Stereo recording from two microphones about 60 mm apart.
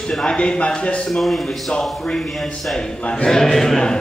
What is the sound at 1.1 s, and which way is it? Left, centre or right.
Speech, centre.